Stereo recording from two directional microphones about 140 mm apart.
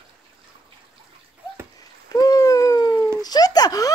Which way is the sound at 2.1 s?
25° left (ahead or behind).